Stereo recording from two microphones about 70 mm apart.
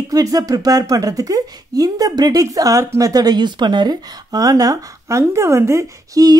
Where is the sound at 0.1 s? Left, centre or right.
Right.